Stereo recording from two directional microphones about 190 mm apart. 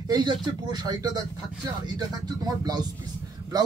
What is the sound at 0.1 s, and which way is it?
Speech, 20° right (ahead or behind).